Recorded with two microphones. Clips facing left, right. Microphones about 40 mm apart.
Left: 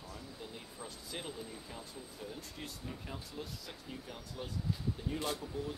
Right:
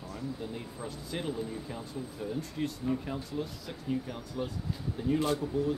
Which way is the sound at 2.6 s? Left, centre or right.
Centre.